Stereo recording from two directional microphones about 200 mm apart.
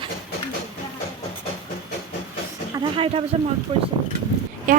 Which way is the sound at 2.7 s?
25° right (ahead or behind).